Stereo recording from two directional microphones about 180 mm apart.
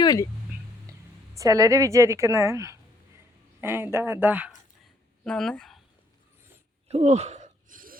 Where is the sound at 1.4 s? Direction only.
20° right (ahead or behind).